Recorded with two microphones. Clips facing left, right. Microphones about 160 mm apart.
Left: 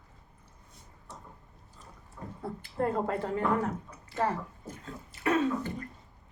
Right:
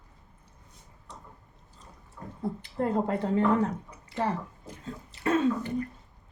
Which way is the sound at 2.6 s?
20° right (ahead or behind).